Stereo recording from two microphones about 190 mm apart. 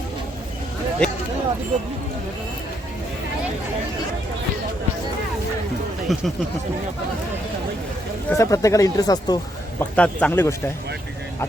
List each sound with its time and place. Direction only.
1.0 s speech: 5° left (ahead or behind)
6.1 s speech: centre (ahead or behind)
8.3 s speech: 15° left (ahead or behind)
9.9 s speech: 5° left (ahead or behind)